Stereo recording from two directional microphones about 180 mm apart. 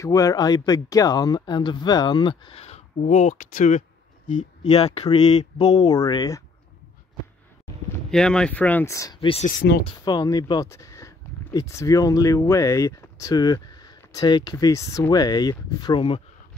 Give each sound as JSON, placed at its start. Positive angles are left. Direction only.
{"t": 0.0, "sound": "speech", "side_deg": 20}
{"t": 5.9, "sound": "speech", "side_deg": 20}
{"t": 8.1, "sound": "speech", "side_deg": 5}
{"t": 9.6, "sound": "speech", "side_deg": 55}
{"t": 9.8, "sound": "speech", "side_deg": 25}